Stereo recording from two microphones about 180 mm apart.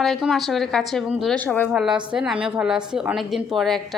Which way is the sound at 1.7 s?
5° right (ahead or behind).